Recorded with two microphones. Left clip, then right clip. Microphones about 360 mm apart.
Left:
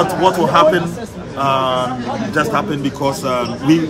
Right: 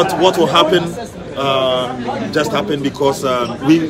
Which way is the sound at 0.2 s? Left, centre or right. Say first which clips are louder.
Left 2 dB; centre.